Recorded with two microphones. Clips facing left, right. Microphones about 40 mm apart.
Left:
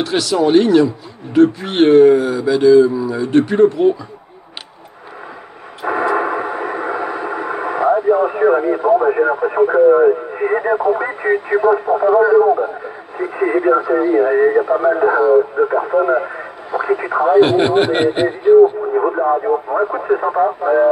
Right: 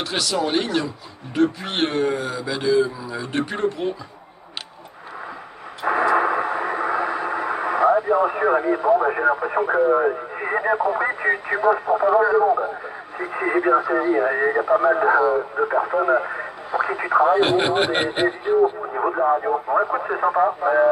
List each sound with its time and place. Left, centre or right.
0.0 s speech: centre
5.8 s a sound: centre
6.1 s radio: centre
9.1 s speech: centre
15.1 s speech: centre